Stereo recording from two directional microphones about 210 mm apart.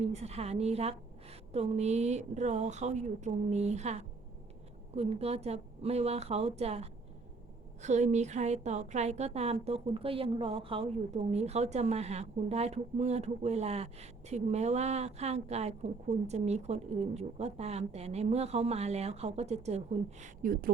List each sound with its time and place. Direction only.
0.1 s a woman's voice: 30° right (ahead or behind)